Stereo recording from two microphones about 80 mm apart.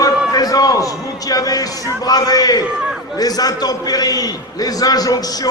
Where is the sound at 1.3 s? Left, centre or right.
Left.